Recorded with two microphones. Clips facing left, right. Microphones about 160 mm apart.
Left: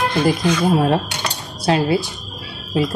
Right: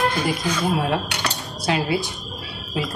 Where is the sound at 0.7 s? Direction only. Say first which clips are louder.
Left 6 dB; 35° left (ahead or behind).